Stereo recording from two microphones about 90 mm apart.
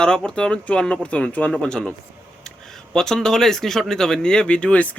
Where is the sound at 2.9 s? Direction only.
5° left (ahead or behind).